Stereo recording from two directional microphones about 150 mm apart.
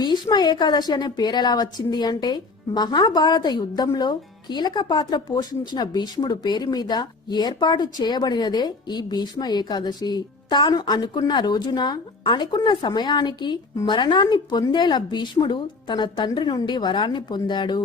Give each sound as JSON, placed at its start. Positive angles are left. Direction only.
{"t": 0.0, "sound": "a woman's voice", "side_deg": 30}